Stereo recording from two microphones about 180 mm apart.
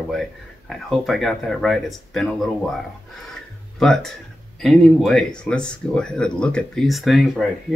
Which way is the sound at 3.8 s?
5° left (ahead or behind).